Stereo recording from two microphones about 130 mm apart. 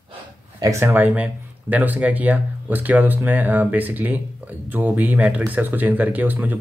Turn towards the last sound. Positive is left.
turn(degrees=-15)  # may be behind; listen again after turning